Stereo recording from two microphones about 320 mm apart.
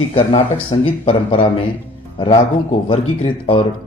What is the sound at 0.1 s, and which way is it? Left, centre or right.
A man's voice, centre.